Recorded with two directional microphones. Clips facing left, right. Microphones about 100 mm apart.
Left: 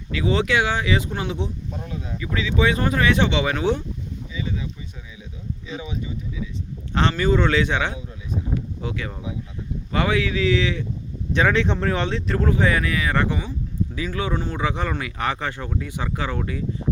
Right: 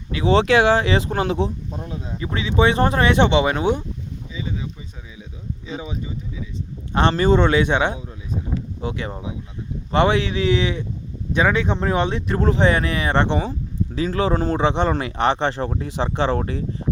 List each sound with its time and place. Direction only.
0.2 s speech: 35° right (ahead or behind)
1.1 s speech: 45° right (ahead or behind)
1.7 s speech: 25° right (ahead or behind)
4.4 s a sound: 30° right (ahead or behind)
5.6 s speech: 30° right (ahead or behind)
7.3 s speech: 20° right (ahead or behind)
8.5 s a sound: 25° right (ahead or behind)
9.9 s speech: 25° right (ahead or behind)
11.3 s speech: 10° right (ahead or behind); by 14.6 s 40° right (ahead or behind)
14.6 s speech: 30° right (ahead or behind)